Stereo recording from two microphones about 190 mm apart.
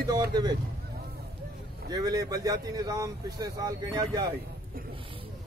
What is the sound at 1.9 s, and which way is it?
Speech, 20° right (ahead or behind).